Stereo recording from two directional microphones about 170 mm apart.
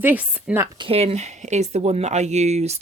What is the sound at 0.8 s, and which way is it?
Speech, 35° right (ahead or behind).